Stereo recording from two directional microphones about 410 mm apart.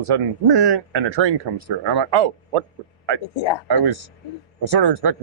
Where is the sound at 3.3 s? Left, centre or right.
Left.